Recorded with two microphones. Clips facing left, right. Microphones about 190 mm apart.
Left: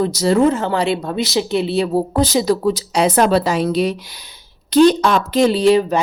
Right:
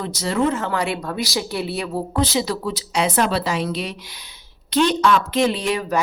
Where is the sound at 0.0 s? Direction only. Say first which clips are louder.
Left 7 dB; 35° left (ahead or behind).